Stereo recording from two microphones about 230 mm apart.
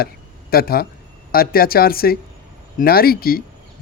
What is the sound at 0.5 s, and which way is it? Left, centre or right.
Speech, left.